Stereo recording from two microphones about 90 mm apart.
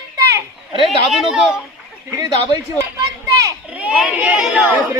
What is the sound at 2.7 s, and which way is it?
Children playing, 40° right (ahead or behind).